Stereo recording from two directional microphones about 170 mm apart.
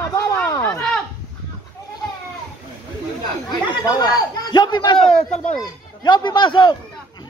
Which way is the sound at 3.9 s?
25° left (ahead or behind).